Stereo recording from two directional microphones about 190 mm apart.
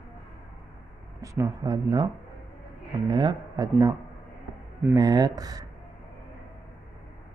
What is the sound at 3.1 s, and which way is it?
Speech, 20° right (ahead or behind).